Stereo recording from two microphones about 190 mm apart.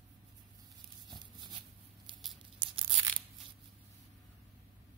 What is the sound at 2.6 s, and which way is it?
Tearing, 25° right (ahead or behind).